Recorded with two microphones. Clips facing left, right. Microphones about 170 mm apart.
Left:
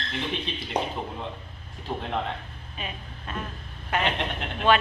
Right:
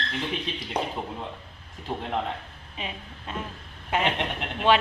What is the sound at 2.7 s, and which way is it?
A man's voice, 20° right (ahead or behind).